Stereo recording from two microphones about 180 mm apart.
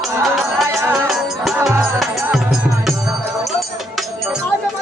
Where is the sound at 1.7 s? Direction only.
15° right (ahead or behind).